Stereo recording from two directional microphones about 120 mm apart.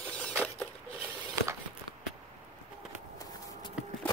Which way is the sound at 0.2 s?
10° left (ahead or behind).